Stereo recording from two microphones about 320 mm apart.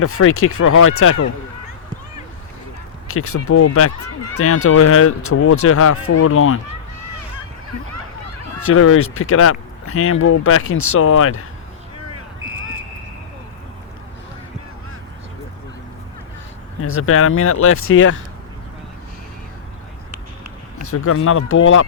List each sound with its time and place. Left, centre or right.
0.1 s speech: left
3.4 s speech: left
7.9 s a sound: right
8.6 s speech: left
16.8 s speech: left
20.9 s speech: left